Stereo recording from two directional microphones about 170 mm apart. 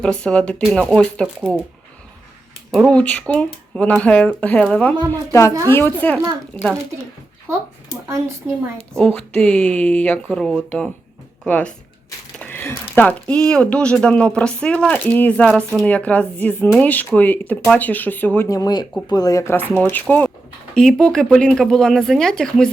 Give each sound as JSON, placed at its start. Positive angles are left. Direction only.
{"t": 0.0, "sound": "speech", "side_deg": 5}
{"t": 2.7, "sound": "speech", "side_deg": 5}
{"t": 9.0, "sound": "speech", "side_deg": 10}
{"t": 18.4, "sound": "speech", "side_deg": 20}